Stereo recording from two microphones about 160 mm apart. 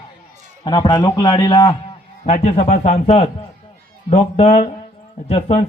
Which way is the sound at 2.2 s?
45° left (ahead or behind).